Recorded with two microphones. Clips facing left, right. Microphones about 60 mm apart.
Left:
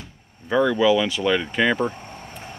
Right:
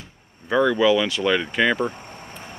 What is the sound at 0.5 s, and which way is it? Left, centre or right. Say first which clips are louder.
Speech: even; centre.